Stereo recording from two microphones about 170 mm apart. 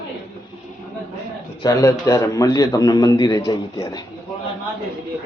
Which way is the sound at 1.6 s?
20° left (ahead or behind).